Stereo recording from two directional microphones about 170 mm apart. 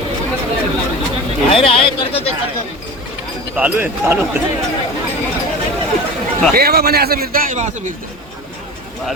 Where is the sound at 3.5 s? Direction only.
10° right (ahead or behind).